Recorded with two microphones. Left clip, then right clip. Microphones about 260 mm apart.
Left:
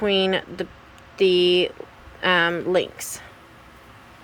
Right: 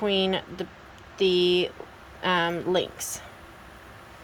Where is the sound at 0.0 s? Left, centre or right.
Centre.